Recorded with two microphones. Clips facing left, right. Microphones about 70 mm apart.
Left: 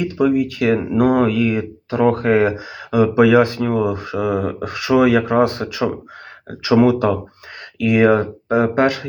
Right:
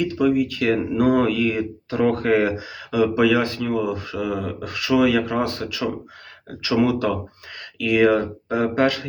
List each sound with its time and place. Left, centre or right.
0.0 s speech: centre